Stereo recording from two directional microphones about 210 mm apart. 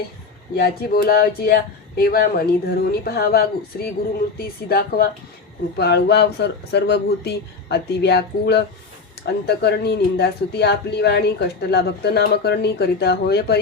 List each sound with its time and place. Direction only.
0.5 s speech: 50° left (ahead or behind)